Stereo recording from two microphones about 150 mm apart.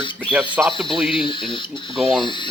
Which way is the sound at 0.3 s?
10° right (ahead or behind).